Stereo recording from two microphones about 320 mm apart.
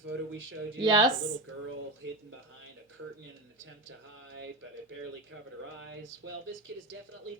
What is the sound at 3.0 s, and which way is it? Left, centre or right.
Speech, right.